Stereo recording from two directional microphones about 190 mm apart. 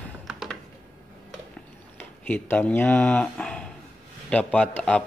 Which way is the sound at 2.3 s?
5° left (ahead or behind).